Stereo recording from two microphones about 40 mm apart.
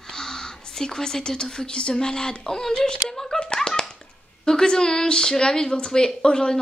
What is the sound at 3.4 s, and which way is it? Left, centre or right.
Hands, centre.